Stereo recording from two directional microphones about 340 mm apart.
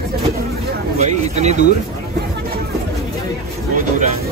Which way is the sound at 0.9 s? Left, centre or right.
Centre.